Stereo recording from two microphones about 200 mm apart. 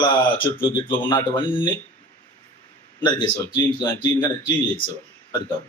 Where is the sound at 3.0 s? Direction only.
20° left (ahead or behind).